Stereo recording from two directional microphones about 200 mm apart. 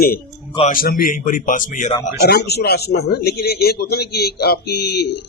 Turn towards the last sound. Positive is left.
turn(degrees=55)  # may be behind; listen again after turning